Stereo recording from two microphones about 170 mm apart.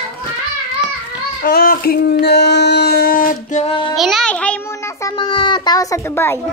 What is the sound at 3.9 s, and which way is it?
Speech, centre (ahead or behind).